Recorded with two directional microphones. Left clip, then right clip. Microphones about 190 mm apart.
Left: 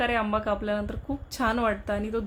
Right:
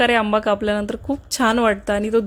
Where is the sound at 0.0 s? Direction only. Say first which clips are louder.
Right 9 dB; 40° right (ahead or behind).